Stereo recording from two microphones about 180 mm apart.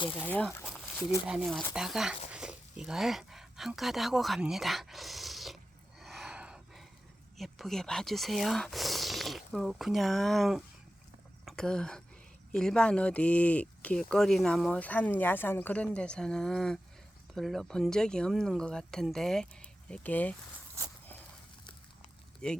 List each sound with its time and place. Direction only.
0.3 s speech: 10° left (ahead or behind)
1.3 s speech: centre (ahead or behind)
6.0 s a sound: centre (ahead or behind)
7.3 s speech: centre (ahead or behind)
20.8 s walk: 15° right (ahead or behind)
22.4 s speech: 5° left (ahead or behind)